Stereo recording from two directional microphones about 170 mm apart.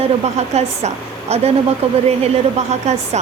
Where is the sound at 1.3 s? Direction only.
35° right (ahead or behind).